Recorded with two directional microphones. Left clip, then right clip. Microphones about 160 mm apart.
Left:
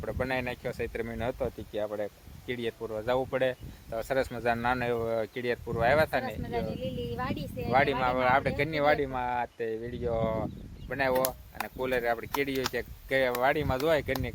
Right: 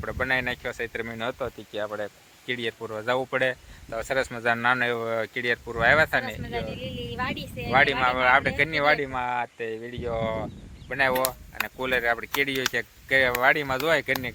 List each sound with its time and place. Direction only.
0.0 s speech: 5° right (ahead or behind)
6.7 s speech: 30° left (ahead or behind)
7.7 s speech: 5° right (ahead or behind)